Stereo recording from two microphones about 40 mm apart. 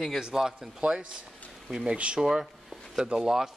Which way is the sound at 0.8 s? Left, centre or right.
Right.